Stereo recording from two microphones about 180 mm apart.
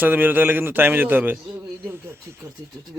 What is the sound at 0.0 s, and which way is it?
Speech, 10° right (ahead or behind).